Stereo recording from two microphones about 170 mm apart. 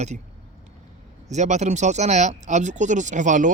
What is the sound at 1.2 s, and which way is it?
Speech, 45° right (ahead or behind).